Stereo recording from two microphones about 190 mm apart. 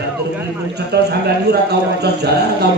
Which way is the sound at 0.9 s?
60° right (ahead or behind).